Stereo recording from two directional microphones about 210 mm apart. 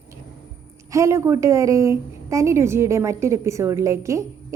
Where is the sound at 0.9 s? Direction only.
15° right (ahead or behind).